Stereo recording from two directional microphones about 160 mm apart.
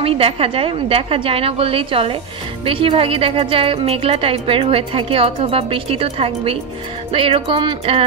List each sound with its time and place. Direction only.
0.0 s a woman's voice: 35° right (ahead or behind)